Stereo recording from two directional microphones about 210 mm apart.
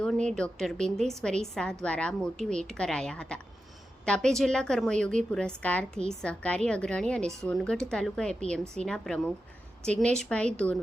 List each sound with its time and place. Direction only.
0.0 s a woman's voice: 5° left (ahead or behind)